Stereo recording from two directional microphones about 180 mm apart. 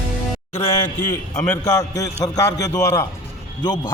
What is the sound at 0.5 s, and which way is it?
A man's voice, 15° left (ahead or behind).